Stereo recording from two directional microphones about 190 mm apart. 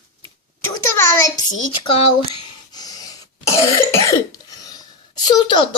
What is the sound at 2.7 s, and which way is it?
Snort, 20° left (ahead or behind).